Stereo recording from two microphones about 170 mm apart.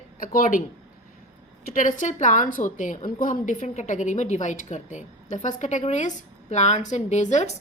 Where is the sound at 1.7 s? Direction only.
50° left (ahead or behind).